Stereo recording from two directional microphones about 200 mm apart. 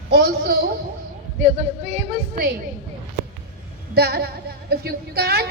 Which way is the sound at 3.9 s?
50° right (ahead or behind).